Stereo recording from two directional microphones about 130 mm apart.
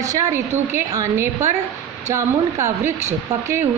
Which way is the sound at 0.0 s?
25° right (ahead or behind).